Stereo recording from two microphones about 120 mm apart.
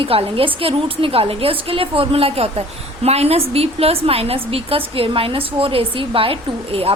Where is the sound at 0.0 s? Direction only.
50° right (ahead or behind).